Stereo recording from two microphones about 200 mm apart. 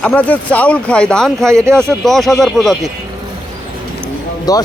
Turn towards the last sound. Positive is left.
turn(degrees=20)  # may be behind; listen again after turning